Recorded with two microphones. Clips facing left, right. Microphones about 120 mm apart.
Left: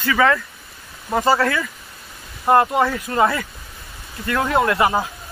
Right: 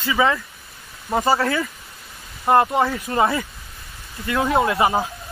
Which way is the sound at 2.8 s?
25° right (ahead or behind).